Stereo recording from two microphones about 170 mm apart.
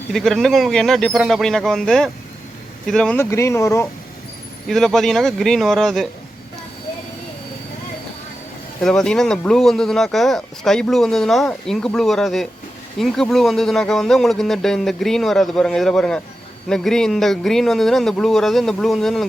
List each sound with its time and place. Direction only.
0.1 s speech: centre (ahead or behind)
3.2 s speech: 15° left (ahead or behind)
4.7 s speech: centre (ahead or behind)
8.8 s speech: 5° left (ahead or behind)